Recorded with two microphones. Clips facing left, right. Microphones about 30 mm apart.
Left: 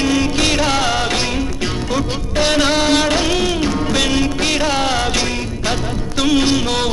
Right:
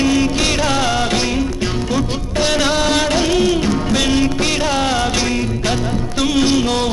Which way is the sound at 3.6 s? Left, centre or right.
Centre.